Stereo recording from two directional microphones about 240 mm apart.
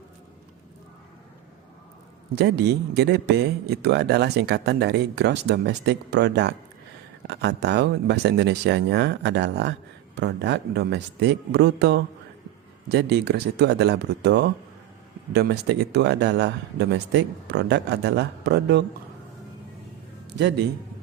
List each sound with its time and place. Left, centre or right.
2.3 s speech: right